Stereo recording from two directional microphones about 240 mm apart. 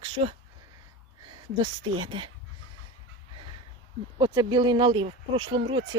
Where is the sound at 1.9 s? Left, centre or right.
Right.